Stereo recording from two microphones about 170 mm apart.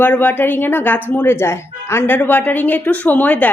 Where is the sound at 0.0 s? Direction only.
10° left (ahead or behind).